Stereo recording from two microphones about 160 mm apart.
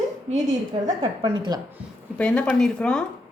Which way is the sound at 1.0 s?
30° right (ahead or behind).